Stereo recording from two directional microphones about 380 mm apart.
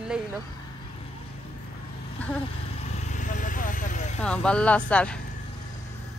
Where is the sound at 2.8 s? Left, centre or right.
Centre.